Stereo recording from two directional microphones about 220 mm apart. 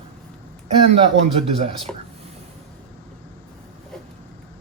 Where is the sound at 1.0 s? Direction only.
25° right (ahead or behind).